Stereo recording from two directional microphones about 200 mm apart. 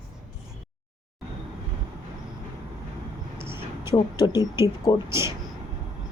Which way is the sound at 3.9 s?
20° left (ahead or behind).